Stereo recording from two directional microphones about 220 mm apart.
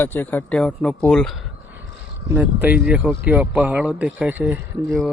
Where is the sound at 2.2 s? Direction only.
10° right (ahead or behind).